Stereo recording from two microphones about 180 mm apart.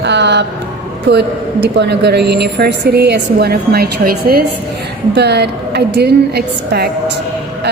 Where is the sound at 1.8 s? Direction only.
70° right (ahead or behind).